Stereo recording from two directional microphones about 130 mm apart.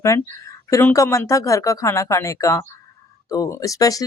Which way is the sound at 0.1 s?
25° left (ahead or behind).